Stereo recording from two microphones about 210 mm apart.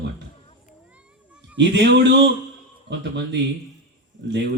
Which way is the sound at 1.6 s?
55° right (ahead or behind).